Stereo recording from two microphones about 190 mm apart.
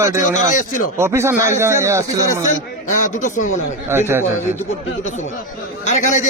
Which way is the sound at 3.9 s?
10° right (ahead or behind).